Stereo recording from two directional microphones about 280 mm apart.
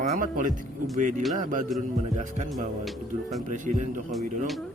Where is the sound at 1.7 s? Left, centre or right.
Centre.